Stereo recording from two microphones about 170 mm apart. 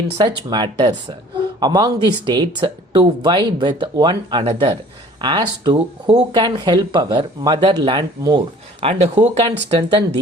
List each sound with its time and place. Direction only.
0.3 s speech: 25° right (ahead or behind)